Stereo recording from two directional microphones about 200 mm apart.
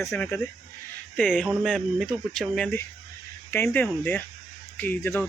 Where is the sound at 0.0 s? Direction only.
10° left (ahead or behind).